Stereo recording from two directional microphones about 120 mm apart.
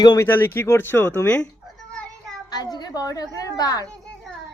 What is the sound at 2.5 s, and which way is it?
A woman's voice, 35° left (ahead or behind).